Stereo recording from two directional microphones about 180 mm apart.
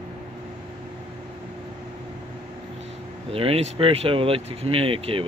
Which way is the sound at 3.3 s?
30° right (ahead or behind).